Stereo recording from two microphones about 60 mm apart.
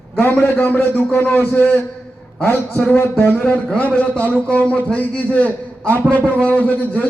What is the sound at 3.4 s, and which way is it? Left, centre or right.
A man's voice, left.